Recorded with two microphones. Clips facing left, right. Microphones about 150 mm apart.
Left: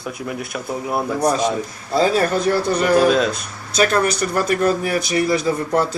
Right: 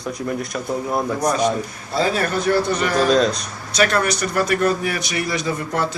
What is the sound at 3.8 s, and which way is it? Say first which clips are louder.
A man's voice: left 1 dB; 35° left (ahead or behind).